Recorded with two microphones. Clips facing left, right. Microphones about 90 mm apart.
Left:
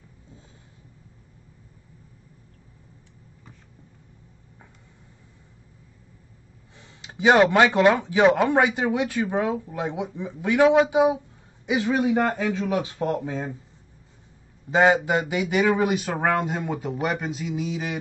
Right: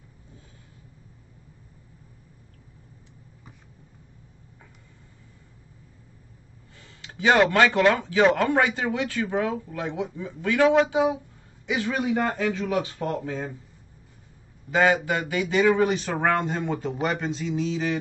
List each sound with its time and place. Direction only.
6.8 s speech: 20° left (ahead or behind)
14.7 s speech: 20° left (ahead or behind)